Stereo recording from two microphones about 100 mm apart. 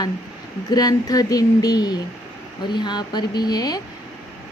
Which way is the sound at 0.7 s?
40° left (ahead or behind).